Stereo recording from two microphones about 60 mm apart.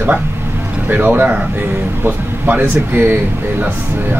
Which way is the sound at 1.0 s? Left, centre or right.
Right.